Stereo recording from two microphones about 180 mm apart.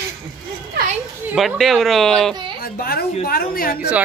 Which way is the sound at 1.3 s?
Centre (ahead or behind).